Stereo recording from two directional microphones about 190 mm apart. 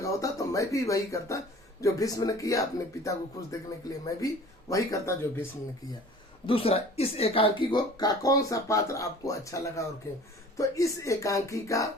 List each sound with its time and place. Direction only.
0.0 s speech: 15° left (ahead or behind)
6.4 s speech: 30° left (ahead or behind)